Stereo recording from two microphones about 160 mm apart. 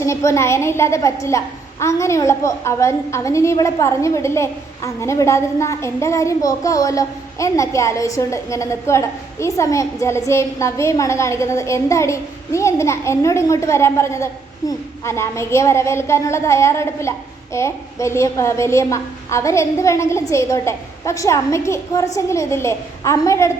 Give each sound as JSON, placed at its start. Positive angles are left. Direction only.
{"t": 0.0, "sound": "a woman's voice", "side_deg": 20}